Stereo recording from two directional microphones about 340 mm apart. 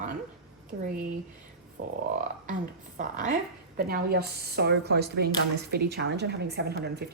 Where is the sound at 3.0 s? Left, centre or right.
Right.